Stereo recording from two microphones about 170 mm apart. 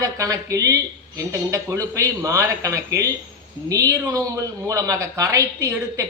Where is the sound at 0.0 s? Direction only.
20° right (ahead or behind).